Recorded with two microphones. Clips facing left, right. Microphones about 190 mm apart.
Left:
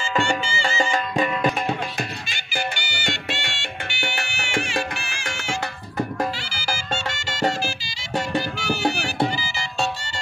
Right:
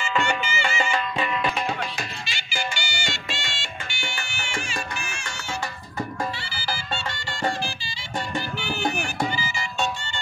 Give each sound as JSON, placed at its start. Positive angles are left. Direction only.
{"t": 0.0, "sound": "music", "side_deg": 30}
{"t": 2.0, "sound": "music", "side_deg": 55}
{"t": 6.3, "sound": "music", "side_deg": 90}
{"t": 8.4, "sound": "music", "side_deg": 40}